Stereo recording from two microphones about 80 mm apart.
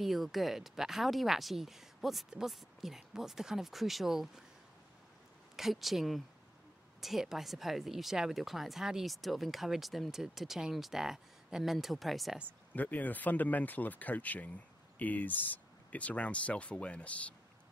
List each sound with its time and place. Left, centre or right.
0.0 s speech: centre
5.6 s speech: centre
12.7 s speech: left